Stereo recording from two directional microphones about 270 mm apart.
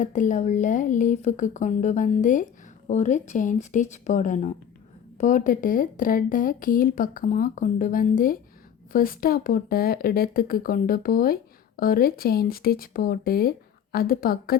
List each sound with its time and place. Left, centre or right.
0.0 s a woman's voice: left